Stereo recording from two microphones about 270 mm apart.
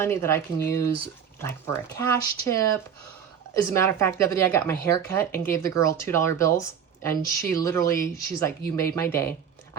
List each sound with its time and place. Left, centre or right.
0.0 s speech: centre